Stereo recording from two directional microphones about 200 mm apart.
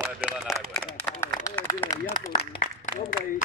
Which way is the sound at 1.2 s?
15° left (ahead or behind).